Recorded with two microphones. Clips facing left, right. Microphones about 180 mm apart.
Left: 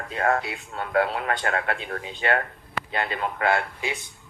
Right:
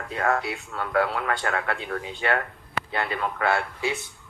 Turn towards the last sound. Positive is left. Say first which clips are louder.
# even
turn(degrees=15)  # may be behind; listen again after turning